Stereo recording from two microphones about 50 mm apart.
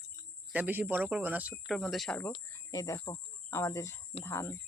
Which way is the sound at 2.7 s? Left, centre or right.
Left.